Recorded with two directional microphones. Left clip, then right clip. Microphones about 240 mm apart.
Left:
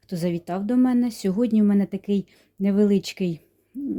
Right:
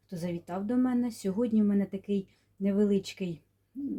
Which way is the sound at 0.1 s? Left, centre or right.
Left.